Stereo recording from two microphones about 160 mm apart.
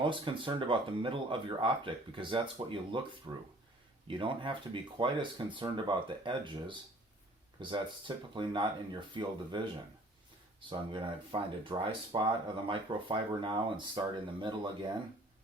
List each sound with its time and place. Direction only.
0.0 s speech: 30° right (ahead or behind)